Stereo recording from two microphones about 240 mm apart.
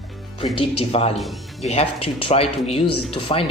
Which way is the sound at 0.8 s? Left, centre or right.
Left.